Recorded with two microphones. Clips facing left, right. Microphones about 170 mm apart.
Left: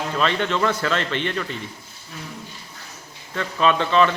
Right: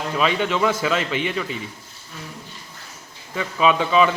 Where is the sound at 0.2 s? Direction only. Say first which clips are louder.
Right 1 dB; 10° right (ahead or behind).